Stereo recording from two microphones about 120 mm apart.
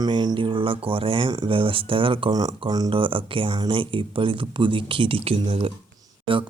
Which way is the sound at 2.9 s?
45° right (ahead or behind).